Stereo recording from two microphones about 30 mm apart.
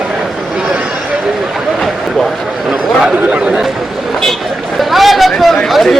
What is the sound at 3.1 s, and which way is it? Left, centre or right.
Chatter, right.